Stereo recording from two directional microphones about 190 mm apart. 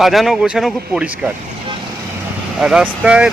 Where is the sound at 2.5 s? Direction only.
5° right (ahead or behind).